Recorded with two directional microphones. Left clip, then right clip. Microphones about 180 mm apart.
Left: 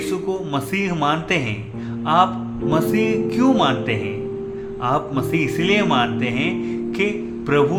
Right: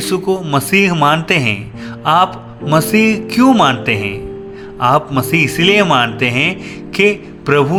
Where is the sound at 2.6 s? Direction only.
35° right (ahead or behind).